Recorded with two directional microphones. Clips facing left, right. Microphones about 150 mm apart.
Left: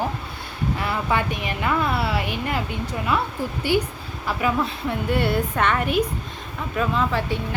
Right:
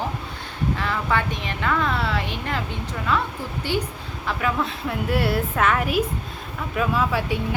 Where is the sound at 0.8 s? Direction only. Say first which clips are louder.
Left 2 dB; 10° left (ahead or behind).